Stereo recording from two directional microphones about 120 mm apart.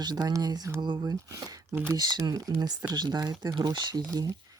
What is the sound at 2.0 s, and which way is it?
Speech, 35° right (ahead or behind).